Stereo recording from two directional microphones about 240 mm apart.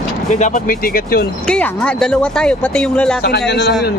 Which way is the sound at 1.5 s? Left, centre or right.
Centre.